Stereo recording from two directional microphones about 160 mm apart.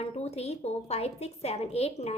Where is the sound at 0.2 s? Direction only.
40° left (ahead or behind).